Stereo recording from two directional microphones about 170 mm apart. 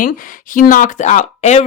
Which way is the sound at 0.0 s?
55° left (ahead or behind).